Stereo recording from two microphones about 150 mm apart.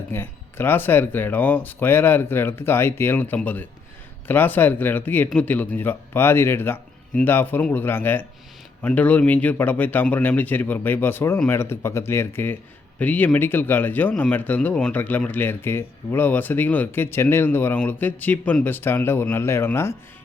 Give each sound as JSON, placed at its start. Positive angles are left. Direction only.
{"t": 0.1, "sound": "speech", "side_deg": 15}